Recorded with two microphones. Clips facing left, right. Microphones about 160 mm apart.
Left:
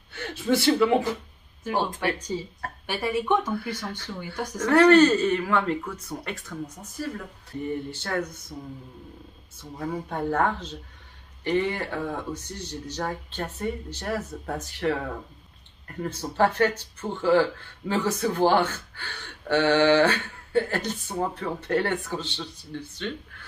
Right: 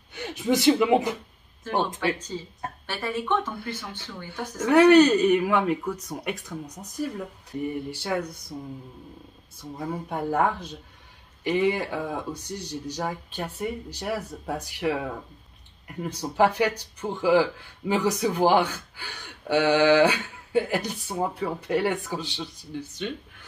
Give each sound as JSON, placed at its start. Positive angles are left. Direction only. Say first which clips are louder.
{"t": 0.1, "sound": "speech", "louder": "even", "side_deg": -15}
{"t": 1.6, "sound": "speech", "louder": "even", "side_deg": 10}
{"t": 4.6, "sound": "speech", "louder": "right 1 dB", "side_deg": -10}
{"t": 7.9, "sound": "speech", "louder": "right 1 dB", "side_deg": -10}
{"t": 9.6, "sound": "speech", "louder": "left 1 dB", "side_deg": -10}